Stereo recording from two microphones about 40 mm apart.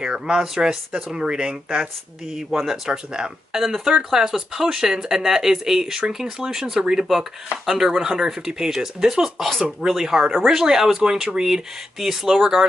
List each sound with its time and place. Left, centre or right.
0.0 s speech: right
0.4 s speech: centre
2.3 s speech: centre
3.6 s speech: centre
7.2 s speech: centre